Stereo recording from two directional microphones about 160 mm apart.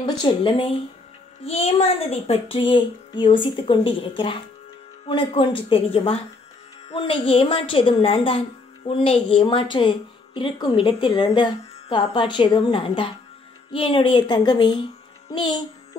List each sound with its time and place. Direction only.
0.0 s a woman's voice: 30° left (ahead or behind)